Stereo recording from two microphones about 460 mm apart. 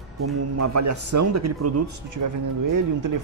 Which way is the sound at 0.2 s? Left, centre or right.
Right.